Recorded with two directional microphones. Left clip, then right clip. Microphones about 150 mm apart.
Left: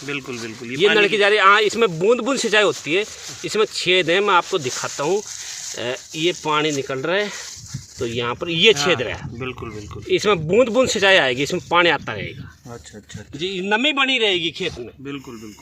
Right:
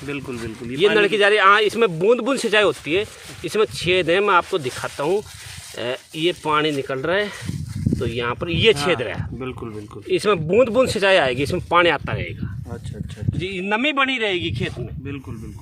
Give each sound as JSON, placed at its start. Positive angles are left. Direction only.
{"t": 0.3, "sound": "speech", "side_deg": -50}
{"t": 0.9, "sound": "speech", "side_deg": -10}
{"t": 9.4, "sound": "speech", "side_deg": -45}
{"t": 10.1, "sound": "speech", "side_deg": 10}
{"t": 13.4, "sound": "a man's voice", "side_deg": -30}
{"t": 13.7, "sound": "speech", "side_deg": 10}
{"t": 14.1, "sound": "a man's voice", "side_deg": -25}